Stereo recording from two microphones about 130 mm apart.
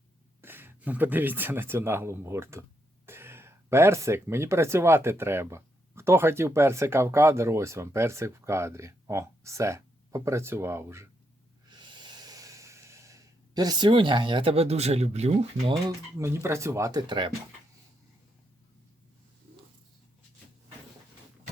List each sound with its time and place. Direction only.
0.4 s speech: 15° right (ahead or behind)
11.7 s snort: 35° right (ahead or behind); by 15.8 s 55° right (ahead or behind)
15.9 s speech: 20° right (ahead or behind)
17.1 s speech: 40° right (ahead or behind)